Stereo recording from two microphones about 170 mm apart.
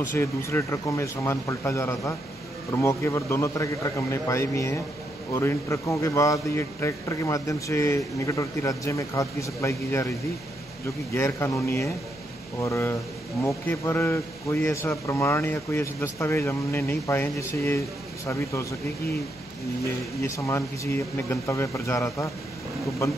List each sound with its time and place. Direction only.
0.1 s a man's voice: 15° left (ahead or behind)
11.1 s a man's voice: 15° left (ahead or behind)
19.8 s a man's voice: 20° left (ahead or behind)